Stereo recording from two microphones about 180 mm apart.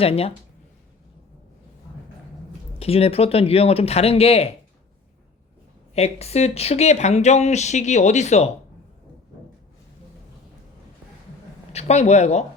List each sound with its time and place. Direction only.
0.0 s speech: 35° left (ahead or behind)
2.7 s speech: 35° left (ahead or behind)
5.9 s speech: 35° left (ahead or behind)
11.7 s speech: 35° left (ahead or behind)